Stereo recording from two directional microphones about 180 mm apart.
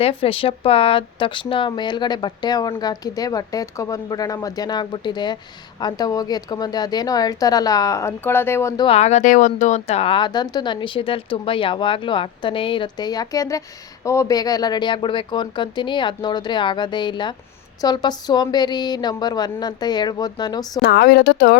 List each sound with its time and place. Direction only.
0.0 s speech: 30° left (ahead or behind)
9.0 s speech: 40° left (ahead or behind); by 20.8 s 20° left (ahead or behind)
20.8 s speech: 60° left (ahead or behind)